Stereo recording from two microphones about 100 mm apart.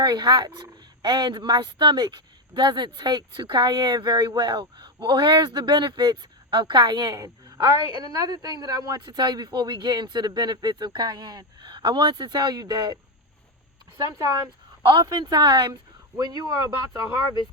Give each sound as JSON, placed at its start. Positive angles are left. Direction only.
{"t": 0.0, "sound": "speech", "side_deg": -45}
{"t": 14.8, "sound": "speech", "side_deg": -45}